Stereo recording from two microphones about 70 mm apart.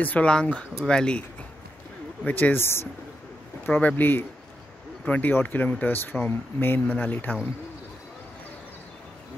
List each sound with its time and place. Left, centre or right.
0.0 s speech: left
2.2 s speech: left
2.5 s speech: left